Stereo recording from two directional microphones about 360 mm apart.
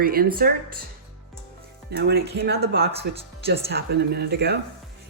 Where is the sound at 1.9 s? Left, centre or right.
Right.